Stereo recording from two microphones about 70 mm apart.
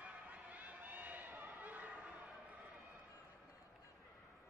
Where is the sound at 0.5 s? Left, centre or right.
Right.